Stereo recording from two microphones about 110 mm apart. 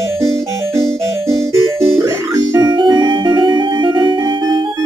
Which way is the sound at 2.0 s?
30° right (ahead or behind).